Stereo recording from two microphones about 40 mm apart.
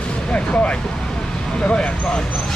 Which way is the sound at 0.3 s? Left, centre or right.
Left.